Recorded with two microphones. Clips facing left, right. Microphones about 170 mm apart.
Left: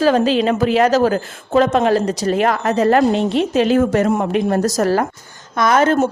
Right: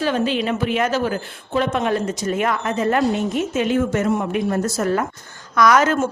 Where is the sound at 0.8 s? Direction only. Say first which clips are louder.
Left 8 dB; 40° left (ahead or behind).